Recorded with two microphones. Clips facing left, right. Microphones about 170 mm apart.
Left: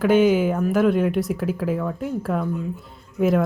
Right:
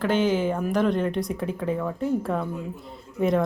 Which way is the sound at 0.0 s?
10° left (ahead or behind).